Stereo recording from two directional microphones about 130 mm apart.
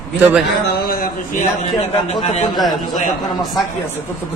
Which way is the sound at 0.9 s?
90° left.